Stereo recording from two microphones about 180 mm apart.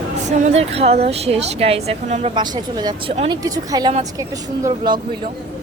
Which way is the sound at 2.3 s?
25° right (ahead or behind).